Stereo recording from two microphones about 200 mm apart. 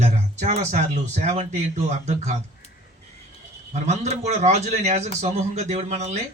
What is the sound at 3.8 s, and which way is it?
A man's voice, 35° right (ahead or behind).